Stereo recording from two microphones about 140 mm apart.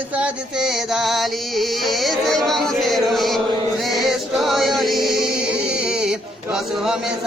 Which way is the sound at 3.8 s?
Centre (ahead or behind).